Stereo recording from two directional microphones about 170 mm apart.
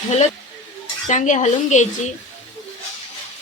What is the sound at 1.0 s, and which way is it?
Dishes, 45° left (ahead or behind).